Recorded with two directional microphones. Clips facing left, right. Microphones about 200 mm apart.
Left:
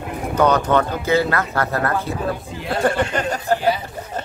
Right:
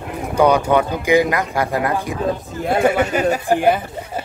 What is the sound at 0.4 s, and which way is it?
Speech, 10° right (ahead or behind).